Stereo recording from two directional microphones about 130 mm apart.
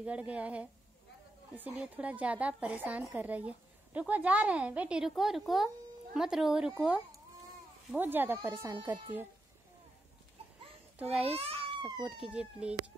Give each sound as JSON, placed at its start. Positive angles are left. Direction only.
{"t": 0.0, "sound": "a woman's voice", "side_deg": -10}
{"t": 11.2, "sound": "a child's voice", "side_deg": -50}
{"t": 12.2, "sound": "a woman's voice", "side_deg": -10}